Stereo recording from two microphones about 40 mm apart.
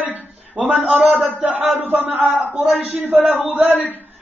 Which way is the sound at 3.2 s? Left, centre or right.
Right.